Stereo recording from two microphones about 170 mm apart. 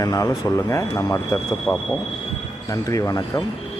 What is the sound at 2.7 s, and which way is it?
Speech, 20° left (ahead or behind).